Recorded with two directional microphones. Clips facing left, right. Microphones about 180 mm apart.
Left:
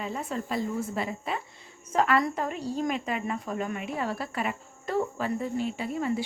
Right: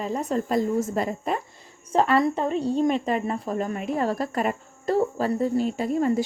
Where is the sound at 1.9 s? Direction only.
30° right (ahead or behind).